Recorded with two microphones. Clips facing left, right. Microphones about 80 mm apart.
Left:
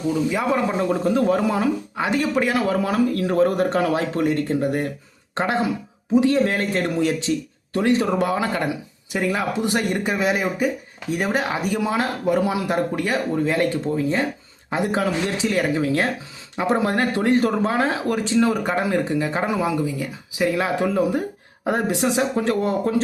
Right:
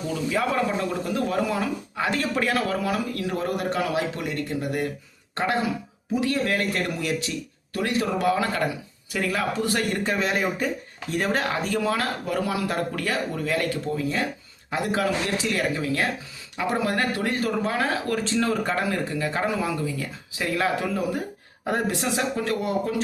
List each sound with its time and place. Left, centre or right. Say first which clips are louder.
0.3 s speech: left 3 dB; centre
2.9 s a man's voice: left 7 dB; left